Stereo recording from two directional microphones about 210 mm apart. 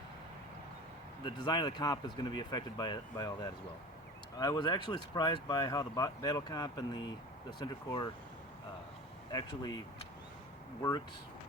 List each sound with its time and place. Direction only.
1.2 s speech: 20° left (ahead or behind)
9.3 s speech: 20° left (ahead or behind)